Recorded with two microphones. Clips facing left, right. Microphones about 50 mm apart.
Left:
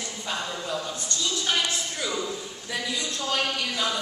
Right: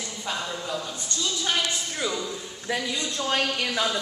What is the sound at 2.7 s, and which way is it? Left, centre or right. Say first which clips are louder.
Speech: right 4 dB; centre.